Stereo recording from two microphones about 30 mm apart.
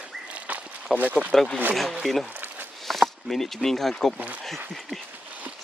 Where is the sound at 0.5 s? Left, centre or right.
Right.